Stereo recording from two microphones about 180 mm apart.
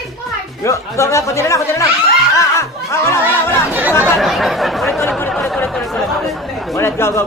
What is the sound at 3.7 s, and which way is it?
Speech, 10° right (ahead or behind).